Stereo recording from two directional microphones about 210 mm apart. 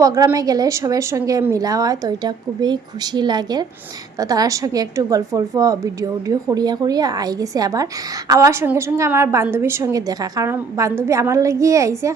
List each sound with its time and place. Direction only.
0.0 s a woman's voice: 15° right (ahead or behind)